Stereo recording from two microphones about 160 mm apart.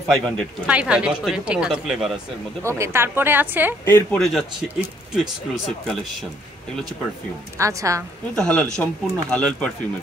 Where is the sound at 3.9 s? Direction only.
15° left (ahead or behind).